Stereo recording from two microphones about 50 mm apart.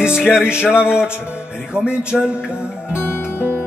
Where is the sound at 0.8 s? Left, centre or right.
Centre.